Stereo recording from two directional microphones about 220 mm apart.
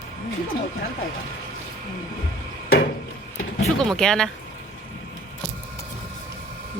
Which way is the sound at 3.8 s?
5° left (ahead or behind).